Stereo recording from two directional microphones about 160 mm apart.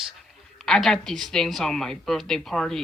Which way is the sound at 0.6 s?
5° left (ahead or behind).